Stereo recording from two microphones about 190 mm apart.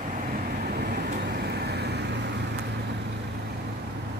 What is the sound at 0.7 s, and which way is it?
Vehicle, 55° right (ahead or behind).